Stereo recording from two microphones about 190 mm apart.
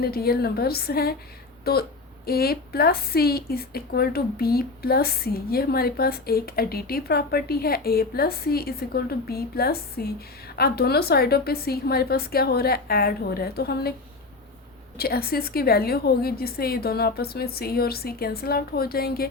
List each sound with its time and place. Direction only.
0.0 s a woman's voice: 55° left (ahead or behind)
14.9 s a woman's voice: 55° left (ahead or behind)